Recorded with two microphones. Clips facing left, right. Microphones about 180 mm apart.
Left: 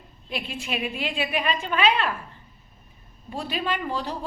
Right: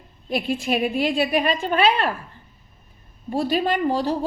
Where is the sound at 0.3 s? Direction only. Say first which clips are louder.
Right 9 dB; 40° right (ahead or behind).